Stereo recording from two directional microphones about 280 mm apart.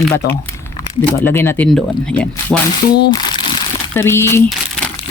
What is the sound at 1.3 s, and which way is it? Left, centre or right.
Speech, centre.